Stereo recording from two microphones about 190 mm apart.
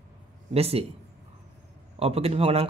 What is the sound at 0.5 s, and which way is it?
Speech, 30° right (ahead or behind).